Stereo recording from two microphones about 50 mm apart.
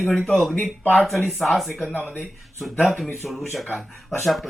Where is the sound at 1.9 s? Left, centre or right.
Left.